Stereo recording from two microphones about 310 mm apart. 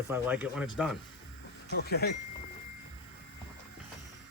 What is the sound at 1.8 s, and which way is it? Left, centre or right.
Speech, left.